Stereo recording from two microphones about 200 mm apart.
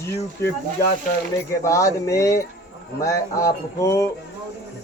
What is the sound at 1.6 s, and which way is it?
Speech, 15° left (ahead or behind).